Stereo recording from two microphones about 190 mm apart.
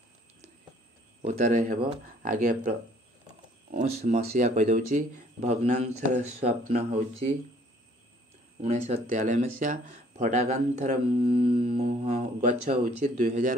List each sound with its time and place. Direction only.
1.2 s speech: 40° right (ahead or behind)
3.7 s speech: 40° right (ahead or behind)
8.5 s speech: 35° right (ahead or behind)